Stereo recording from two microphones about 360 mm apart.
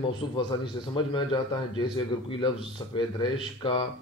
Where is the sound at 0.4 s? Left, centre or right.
Centre.